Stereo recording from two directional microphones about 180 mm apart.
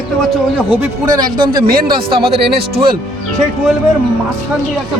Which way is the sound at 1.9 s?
30° right (ahead or behind).